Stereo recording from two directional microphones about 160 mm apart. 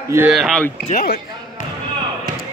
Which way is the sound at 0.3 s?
Centre (ahead or behind).